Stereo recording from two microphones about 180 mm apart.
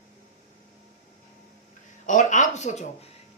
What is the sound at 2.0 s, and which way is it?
Speech, 45° left (ahead or behind).